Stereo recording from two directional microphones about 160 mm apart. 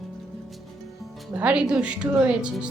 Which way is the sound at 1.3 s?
10° right (ahead or behind).